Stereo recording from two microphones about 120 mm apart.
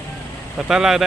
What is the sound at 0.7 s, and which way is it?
Speech, 5° right (ahead or behind).